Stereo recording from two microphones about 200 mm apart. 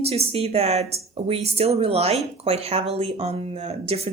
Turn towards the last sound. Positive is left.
turn(degrees=-30)  # may be behind; listen again after turning